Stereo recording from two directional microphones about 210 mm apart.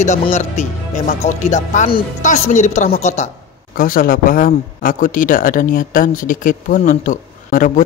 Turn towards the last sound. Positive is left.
turn(degrees=40)  # may be behind; listen again after turning